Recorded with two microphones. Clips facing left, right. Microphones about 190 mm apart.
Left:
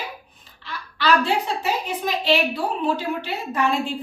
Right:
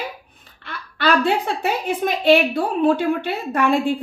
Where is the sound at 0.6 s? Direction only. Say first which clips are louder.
Right 2 dB; 55° right (ahead or behind).